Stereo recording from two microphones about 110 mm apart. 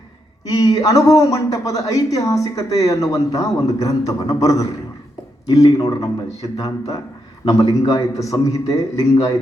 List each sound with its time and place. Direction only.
0.4 s speech: 35° left (ahead or behind)